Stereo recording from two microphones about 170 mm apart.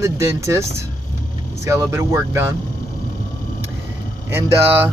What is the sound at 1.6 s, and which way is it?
Speech, 15° right (ahead or behind).